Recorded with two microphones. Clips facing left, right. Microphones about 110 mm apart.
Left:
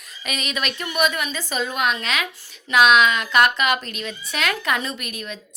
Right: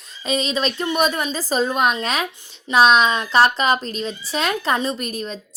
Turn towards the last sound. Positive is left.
turn(degrees=-35)  # may be behind; listen again after turning